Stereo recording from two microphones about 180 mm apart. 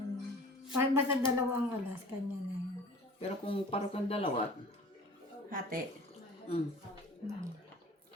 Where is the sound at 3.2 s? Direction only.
30° left (ahead or behind).